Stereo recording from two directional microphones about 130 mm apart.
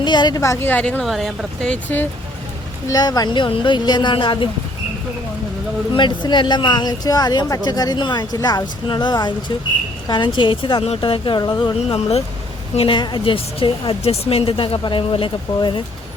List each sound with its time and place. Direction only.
0.0 s speech: 35° left (ahead or behind)
0.7 s speech: 10° left (ahead or behind)
1.0 s speech: centre (ahead or behind)
2.9 s speech: 30° left (ahead or behind)
5.9 s speech: 35° left (ahead or behind)
11.9 s a woman's voice: 50° left (ahead or behind)